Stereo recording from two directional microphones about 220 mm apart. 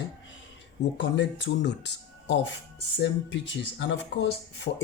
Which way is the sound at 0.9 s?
55° left (ahead or behind).